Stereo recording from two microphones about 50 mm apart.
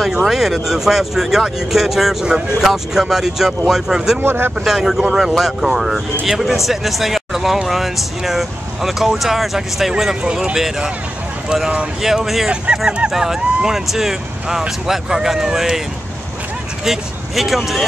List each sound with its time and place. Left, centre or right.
0.2 s speech: centre
4.2 s speech: right
4.6 s speech: centre
10.2 s speech: centre
12.0 s speech: centre
12.7 s honk: centre
13.1 s speech: centre
16.8 s speech: centre